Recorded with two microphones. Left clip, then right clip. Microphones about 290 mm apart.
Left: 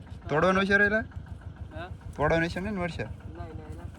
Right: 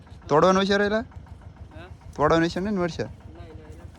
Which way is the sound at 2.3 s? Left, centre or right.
Centre.